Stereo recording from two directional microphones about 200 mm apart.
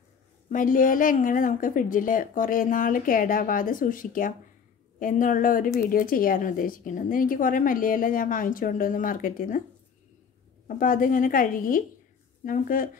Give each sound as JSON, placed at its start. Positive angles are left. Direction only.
{"t": 0.5, "sound": "a woman's voice", "side_deg": 40}
{"t": 10.8, "sound": "a woman's voice", "side_deg": 45}